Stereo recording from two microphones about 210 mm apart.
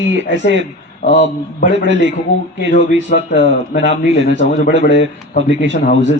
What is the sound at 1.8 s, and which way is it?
Speech, 60° right (ahead or behind).